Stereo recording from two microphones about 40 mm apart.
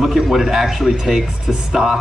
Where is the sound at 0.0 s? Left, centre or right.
Centre.